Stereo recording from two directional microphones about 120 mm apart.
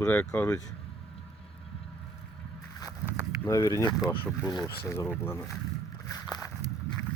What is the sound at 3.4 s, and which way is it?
Speech, 25° left (ahead or behind).